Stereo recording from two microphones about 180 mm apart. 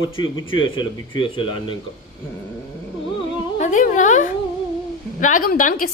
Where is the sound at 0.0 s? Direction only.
30° left (ahead or behind).